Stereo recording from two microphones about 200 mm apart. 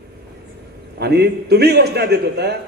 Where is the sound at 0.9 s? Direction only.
55° right (ahead or behind).